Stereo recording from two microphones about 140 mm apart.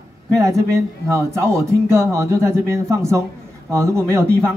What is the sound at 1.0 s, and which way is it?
A man's voice, 20° right (ahead or behind).